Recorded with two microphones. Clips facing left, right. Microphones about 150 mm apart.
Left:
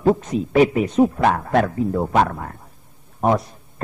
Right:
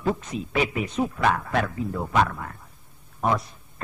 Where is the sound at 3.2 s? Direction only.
40° left (ahead or behind).